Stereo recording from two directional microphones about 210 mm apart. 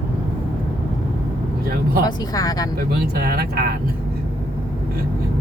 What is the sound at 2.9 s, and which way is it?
Speech, 45° right (ahead or behind).